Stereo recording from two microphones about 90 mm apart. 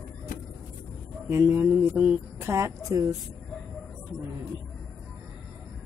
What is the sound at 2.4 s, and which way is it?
Speech, 30° right (ahead or behind).